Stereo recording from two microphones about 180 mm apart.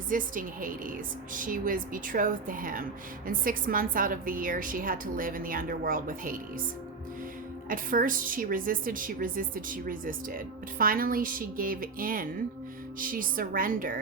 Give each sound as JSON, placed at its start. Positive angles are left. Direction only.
{"t": 0.1, "sound": "a woman's voice", "side_deg": -50}
{"t": 7.7, "sound": "a woman's voice", "side_deg": -50}